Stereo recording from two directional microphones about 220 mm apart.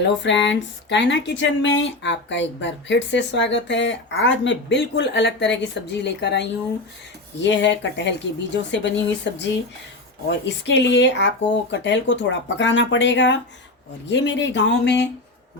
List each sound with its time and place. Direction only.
0.0 s speech: 55° left (ahead or behind)